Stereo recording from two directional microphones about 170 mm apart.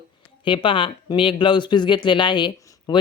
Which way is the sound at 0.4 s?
30° left (ahead or behind).